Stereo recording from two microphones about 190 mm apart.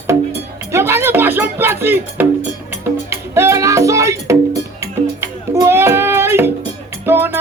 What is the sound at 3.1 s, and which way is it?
Music, 15° right (ahead or behind).